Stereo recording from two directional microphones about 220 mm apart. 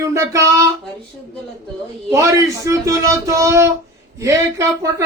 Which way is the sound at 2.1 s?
15° right (ahead or behind).